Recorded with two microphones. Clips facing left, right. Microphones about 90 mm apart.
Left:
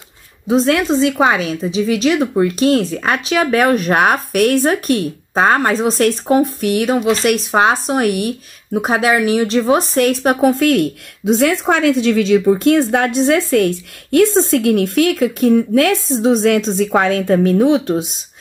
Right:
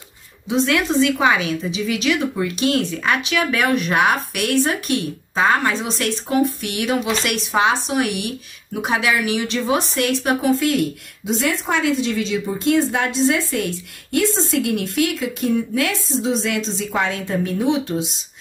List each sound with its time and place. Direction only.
0.5 s a woman's voice: 35° left (ahead or behind); by 18.0 s 55° left (ahead or behind)